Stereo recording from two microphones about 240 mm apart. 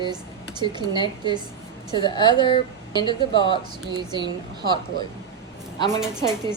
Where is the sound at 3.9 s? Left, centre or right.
Centre.